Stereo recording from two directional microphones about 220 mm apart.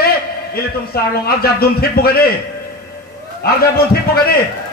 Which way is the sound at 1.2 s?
45° left (ahead or behind).